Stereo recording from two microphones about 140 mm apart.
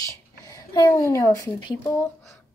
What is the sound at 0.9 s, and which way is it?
Speech, 20° left (ahead or behind).